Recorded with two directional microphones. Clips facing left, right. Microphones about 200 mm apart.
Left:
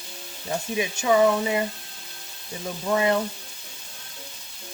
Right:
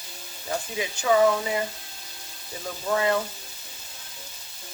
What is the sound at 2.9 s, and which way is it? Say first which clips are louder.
Speech: left 2 dB; 20° left (ahead or behind).